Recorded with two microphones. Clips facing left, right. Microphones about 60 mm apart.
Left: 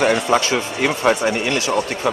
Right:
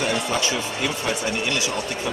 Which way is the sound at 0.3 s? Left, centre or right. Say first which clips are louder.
Left 6 dB; left.